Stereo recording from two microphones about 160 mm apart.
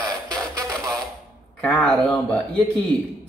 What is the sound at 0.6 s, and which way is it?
Music, 20° right (ahead or behind).